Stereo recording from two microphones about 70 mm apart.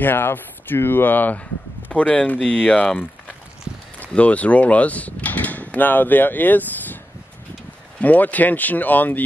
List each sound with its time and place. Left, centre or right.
0.0 s speech: left
8.0 s speech: left